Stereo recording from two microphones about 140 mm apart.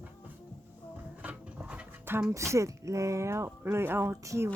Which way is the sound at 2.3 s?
20° right (ahead or behind).